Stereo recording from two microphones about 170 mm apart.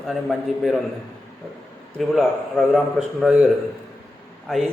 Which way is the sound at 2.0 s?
Centre (ahead or behind).